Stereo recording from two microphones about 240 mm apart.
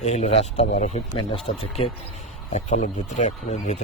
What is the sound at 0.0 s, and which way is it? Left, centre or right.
Speech, left.